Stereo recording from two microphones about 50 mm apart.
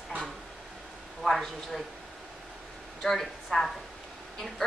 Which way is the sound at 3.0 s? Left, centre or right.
Centre.